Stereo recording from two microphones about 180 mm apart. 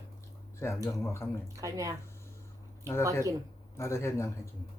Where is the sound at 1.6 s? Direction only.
20° right (ahead or behind).